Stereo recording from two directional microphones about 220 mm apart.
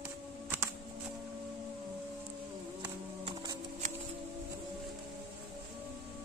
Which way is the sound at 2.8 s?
20° right (ahead or behind).